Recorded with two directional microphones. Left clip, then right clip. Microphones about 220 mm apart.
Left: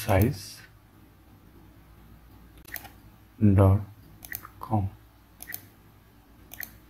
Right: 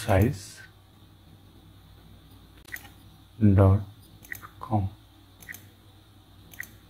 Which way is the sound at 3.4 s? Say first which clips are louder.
Even; centre (ahead or behind).